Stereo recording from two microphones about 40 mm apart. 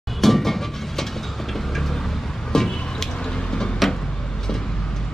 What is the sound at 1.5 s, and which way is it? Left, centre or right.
Vehicle, centre.